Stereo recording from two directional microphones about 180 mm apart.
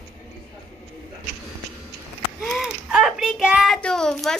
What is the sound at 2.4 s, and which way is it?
A child's voice, centre (ahead or behind).